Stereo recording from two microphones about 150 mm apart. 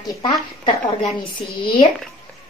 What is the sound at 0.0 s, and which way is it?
A woman's voice, 30° left (ahead or behind).